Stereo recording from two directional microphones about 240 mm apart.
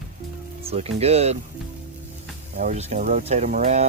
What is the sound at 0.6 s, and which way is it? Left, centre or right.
Speech, right.